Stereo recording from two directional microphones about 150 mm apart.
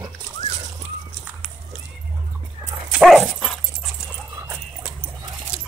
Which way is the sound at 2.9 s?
Centre (ahead or behind).